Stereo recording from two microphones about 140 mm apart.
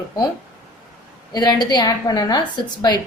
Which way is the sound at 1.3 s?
30° left (ahead or behind).